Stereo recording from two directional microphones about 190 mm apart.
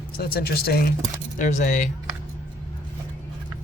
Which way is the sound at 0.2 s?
55° left (ahead or behind).